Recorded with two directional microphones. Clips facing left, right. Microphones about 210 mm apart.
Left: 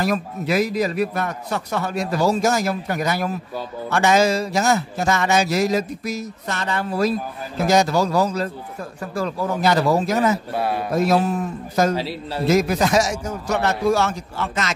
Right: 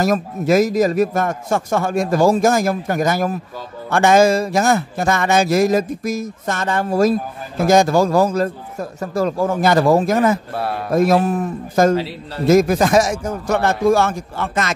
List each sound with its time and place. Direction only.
0.0 s speech: 45° right (ahead or behind)
10.5 s speech: centre (ahead or behind)
10.9 s speech: 50° right (ahead or behind)
12.0 s a man's voice: 10° left (ahead or behind)
12.4 s speech: 50° right (ahead or behind)